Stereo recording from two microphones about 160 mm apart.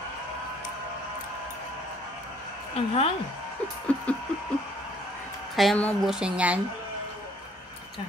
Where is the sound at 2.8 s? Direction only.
40° left (ahead or behind).